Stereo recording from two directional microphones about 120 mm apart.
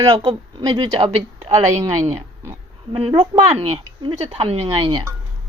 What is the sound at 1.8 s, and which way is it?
Speech, 30° right (ahead or behind).